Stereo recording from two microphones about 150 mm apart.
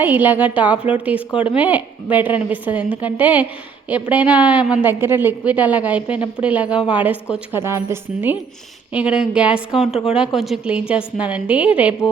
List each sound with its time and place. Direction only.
0.0 s a woman's voice: 10° right (ahead or behind)
9.9 s speech: 40° left (ahead or behind)
10.2 s a woman's voice: centre (ahead or behind)